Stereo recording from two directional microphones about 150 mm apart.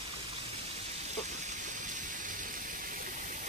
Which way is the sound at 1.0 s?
50° right (ahead or behind).